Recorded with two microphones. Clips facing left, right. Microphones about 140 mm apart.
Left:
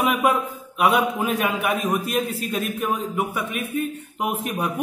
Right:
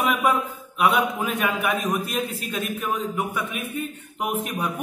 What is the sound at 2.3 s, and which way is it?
Speech, 35° left (ahead or behind).